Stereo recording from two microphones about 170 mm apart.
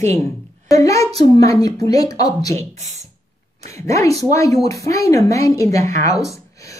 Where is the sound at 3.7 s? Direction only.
20° left (ahead or behind).